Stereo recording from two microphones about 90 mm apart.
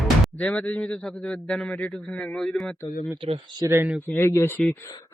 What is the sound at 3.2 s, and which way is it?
Speech, 90° right.